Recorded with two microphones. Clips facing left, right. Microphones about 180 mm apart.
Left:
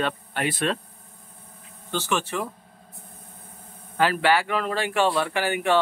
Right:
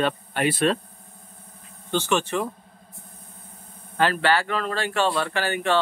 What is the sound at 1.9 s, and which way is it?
Speech, 5° left (ahead or behind).